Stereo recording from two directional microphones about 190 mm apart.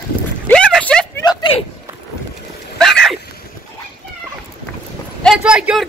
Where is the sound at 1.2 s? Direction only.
25° left (ahead or behind).